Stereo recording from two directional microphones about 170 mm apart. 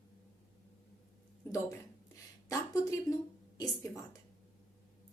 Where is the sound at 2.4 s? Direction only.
20° left (ahead or behind).